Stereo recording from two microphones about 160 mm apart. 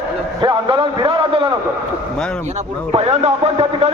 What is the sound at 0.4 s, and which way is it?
A man's voice, 30° right (ahead or behind).